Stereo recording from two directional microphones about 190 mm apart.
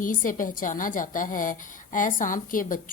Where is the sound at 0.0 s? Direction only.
45° left (ahead or behind).